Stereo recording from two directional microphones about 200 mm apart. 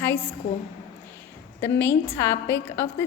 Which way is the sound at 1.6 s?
10° left (ahead or behind).